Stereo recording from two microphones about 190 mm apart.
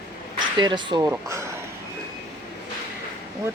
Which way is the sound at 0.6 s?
25° right (ahead or behind).